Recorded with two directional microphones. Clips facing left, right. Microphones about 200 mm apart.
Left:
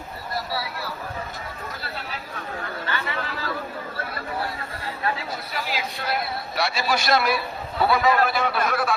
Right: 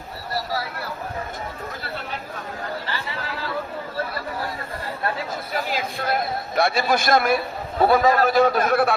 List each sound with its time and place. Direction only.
0.3 s a sound: 45° right (ahead or behind)
2.8 s chatter: 30° right (ahead or behind)
5.5 s a man's voice: 50° right (ahead or behind)